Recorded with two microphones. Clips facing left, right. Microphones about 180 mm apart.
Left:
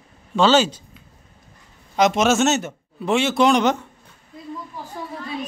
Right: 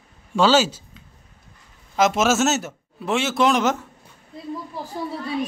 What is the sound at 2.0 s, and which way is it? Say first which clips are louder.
A man's voice: left 1 dB; centre (ahead or behind).